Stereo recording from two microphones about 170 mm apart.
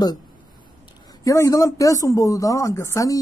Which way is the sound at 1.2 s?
20° left (ahead or behind).